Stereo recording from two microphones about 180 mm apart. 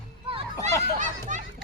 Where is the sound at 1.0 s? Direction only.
45° right (ahead or behind).